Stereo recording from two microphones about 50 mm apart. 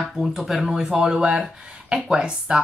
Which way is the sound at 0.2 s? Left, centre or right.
Centre.